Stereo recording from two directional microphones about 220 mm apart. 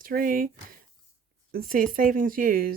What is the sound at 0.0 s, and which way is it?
Speech, 40° right (ahead or behind).